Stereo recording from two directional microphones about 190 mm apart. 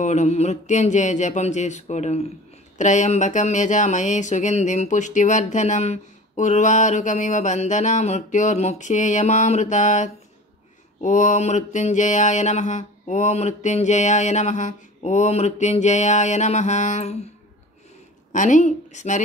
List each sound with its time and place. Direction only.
0.0 s speech: 35° left (ahead or behind)
18.3 s speech: 40° left (ahead or behind)